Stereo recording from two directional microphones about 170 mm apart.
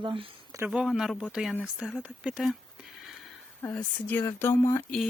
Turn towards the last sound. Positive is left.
turn(degrees=15)  # may be behind; listen again after turning